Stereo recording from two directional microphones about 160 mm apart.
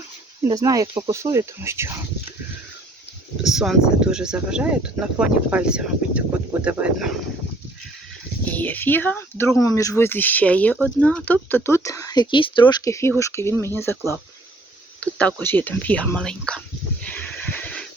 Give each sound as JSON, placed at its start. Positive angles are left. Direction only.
{"t": 0.4, "sound": "speech", "side_deg": -20}
{"t": 3.4, "sound": "speech", "side_deg": 0}
{"t": 8.5, "sound": "speech", "side_deg": 10}
{"t": 15.4, "sound": "speech", "side_deg": 10}
{"t": 17.0, "sound": "a sound", "side_deg": 10}